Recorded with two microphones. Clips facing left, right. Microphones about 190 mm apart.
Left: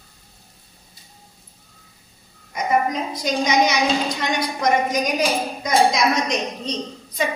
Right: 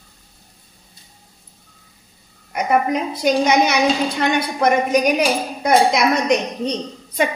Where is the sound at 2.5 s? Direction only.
60° right (ahead or behind).